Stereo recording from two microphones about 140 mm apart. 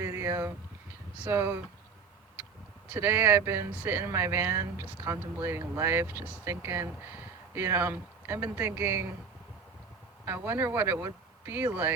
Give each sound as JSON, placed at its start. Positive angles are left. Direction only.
{"t": 0.0, "sound": "a sound", "side_deg": -20}
{"t": 1.2, "sound": "speech", "side_deg": -15}
{"t": 2.9, "sound": "speech", "side_deg": -15}
{"t": 10.2, "sound": "speech", "side_deg": -15}